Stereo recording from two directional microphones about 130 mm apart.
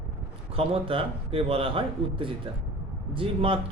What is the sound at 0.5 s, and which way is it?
A man's voice, 45° right (ahead or behind).